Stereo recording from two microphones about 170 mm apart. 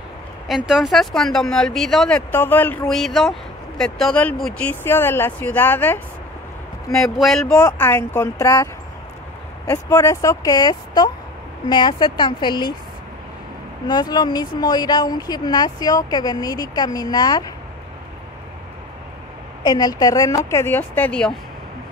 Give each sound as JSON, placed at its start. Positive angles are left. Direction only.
{"t": 0.5, "sound": "speech", "side_deg": -5}
{"t": 9.7, "sound": "speech", "side_deg": 15}
{"t": 13.8, "sound": "speech", "side_deg": 25}
{"t": 19.6, "sound": "speech", "side_deg": 25}